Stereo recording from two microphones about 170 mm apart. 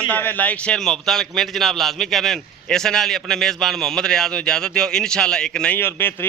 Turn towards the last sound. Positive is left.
turn(degrees=10)  # may be behind; listen again after turning